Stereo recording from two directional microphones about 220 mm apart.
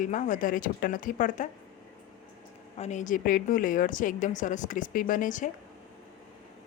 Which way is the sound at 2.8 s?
35° left (ahead or behind).